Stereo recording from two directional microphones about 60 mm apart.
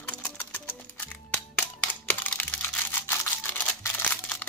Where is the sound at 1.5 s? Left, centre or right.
Left.